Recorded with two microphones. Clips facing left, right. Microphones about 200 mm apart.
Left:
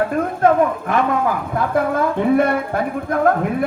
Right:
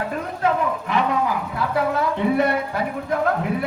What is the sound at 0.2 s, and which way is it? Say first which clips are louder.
Speech: left 7 dB; 50° left (ahead or behind).